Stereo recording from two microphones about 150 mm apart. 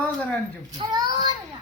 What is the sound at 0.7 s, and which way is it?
Speech, 30° right (ahead or behind).